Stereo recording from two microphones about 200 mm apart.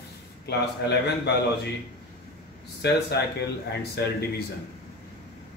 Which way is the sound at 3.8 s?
50° left (ahead or behind).